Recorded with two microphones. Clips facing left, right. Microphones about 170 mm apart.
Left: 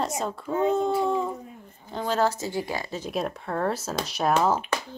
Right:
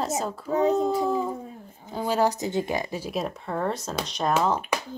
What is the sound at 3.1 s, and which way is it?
Speech, centre (ahead or behind).